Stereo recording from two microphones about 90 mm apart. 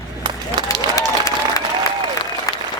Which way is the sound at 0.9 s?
40° left (ahead or behind).